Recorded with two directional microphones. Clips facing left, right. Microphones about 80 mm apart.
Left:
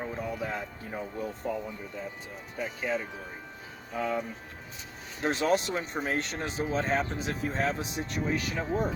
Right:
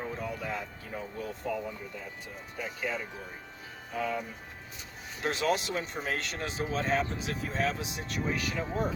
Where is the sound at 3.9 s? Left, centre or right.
Left.